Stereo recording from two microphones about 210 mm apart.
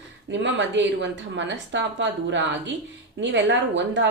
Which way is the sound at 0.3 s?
60° right (ahead or behind).